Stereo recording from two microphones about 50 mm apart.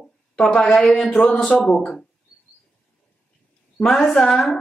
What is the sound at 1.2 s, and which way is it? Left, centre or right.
Speech, centre.